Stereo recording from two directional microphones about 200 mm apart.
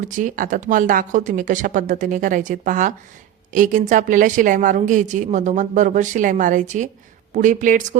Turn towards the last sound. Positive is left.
turn(degrees=-40)  # may be behind; listen again after turning